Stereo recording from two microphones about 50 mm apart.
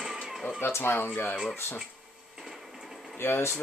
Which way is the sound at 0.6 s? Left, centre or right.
Left.